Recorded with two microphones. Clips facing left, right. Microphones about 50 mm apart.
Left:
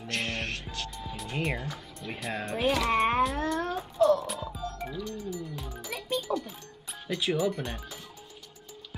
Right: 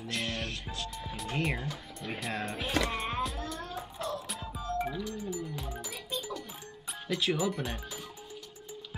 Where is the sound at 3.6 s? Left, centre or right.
Left.